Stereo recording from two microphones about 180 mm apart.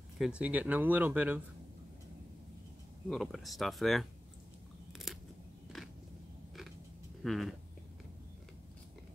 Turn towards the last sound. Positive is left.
turn(degrees=0)  # may be behind; listen again after turning